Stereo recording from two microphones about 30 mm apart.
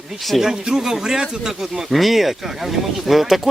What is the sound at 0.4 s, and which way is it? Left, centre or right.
Speech, right.